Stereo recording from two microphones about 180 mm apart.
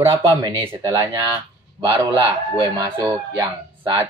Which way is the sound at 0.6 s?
10° right (ahead or behind).